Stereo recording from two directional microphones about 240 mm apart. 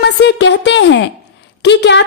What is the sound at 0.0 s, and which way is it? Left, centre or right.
A woman's voice, left.